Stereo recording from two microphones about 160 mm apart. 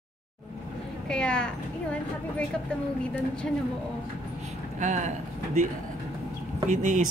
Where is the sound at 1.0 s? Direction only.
5° left (ahead or behind).